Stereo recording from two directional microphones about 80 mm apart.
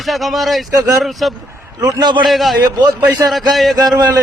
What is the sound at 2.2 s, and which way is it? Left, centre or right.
Speech, centre.